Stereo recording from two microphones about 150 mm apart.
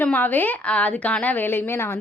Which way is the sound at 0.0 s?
10° left (ahead or behind).